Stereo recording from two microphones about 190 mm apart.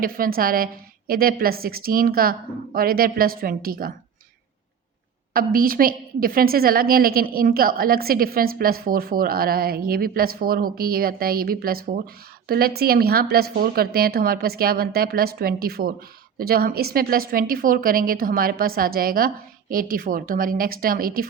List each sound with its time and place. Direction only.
0.0 s a woman's voice: 50° right (ahead or behind)
5.3 s a woman's voice: 50° right (ahead or behind)